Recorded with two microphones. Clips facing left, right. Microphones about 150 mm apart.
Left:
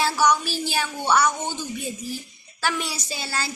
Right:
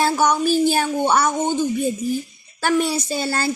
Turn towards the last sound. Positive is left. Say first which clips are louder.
# right 8 dB
turn(degrees=-50)  # may be behind; listen again after turning